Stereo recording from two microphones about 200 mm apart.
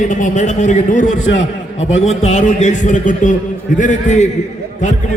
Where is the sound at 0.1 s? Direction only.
40° left (ahead or behind).